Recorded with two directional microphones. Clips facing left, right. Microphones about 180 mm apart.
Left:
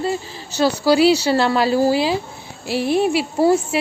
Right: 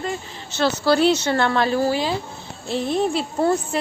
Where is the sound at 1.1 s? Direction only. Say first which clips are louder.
Left 4 dB; 35° left (ahead or behind).